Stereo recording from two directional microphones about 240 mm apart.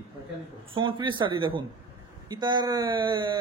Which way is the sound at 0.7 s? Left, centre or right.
Centre.